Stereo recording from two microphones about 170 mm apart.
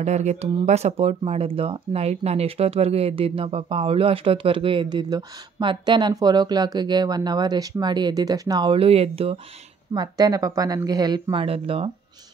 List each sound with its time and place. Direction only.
0.0 s speech: 40° right (ahead or behind); by 8.7 s 20° right (ahead or behind)
8.7 s speech: 35° right (ahead or behind)
9.9 s speech: 20° right (ahead or behind)